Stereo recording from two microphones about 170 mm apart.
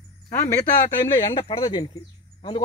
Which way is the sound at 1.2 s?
25° left (ahead or behind).